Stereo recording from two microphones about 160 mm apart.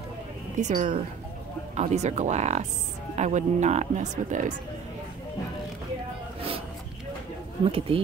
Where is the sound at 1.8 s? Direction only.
45° right (ahead or behind).